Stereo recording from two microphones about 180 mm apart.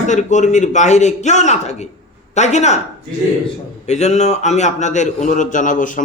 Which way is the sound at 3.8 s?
40° left (ahead or behind).